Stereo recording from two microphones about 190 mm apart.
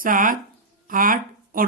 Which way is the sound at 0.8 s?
45° right (ahead or behind).